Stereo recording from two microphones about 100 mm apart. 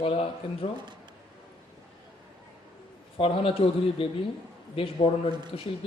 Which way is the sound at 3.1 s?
65° left (ahead or behind).